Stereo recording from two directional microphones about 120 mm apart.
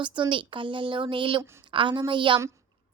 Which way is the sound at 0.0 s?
40° right (ahead or behind).